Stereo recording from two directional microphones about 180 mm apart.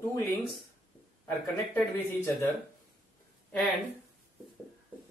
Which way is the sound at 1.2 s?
10° left (ahead or behind).